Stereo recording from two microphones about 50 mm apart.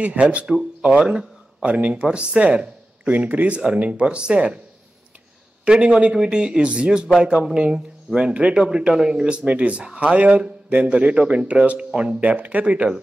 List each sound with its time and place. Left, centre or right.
0.0 s speech: right
5.7 s speech: right
12.2 s speech: right